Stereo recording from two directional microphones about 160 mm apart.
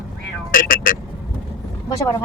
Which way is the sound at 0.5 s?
60° left (ahead or behind).